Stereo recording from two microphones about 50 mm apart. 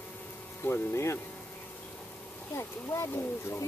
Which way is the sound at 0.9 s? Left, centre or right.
Left.